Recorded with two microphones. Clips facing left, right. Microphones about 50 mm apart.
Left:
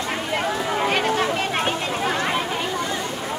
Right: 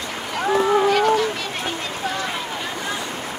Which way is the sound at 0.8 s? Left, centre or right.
Left.